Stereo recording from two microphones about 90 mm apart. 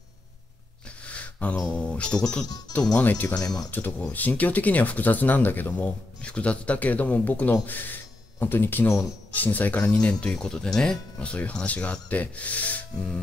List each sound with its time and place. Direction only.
0.8 s a sound: 15° left (ahead or behind)
1.8 s speech: 10° left (ahead or behind)
3.3 s speech: 45° left (ahead or behind)
4.1 s speech: 20° left (ahead or behind)